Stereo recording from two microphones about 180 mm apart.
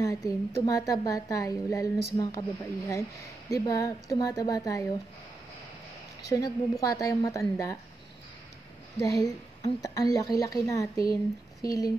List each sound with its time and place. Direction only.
0.0 s a woman's voice: 20° left (ahead or behind)
6.2 s a woman's voice: 20° left (ahead or behind)
9.0 s a woman's voice: 20° left (ahead or behind)